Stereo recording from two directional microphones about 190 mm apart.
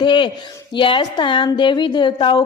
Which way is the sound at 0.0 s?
25° left (ahead or behind).